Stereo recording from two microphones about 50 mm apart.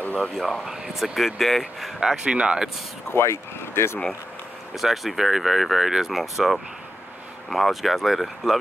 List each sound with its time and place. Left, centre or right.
0.0 s a sound: left
0.7 s speech: centre
2.0 s speech: centre
3.1 s speech: left
4.7 s speech: centre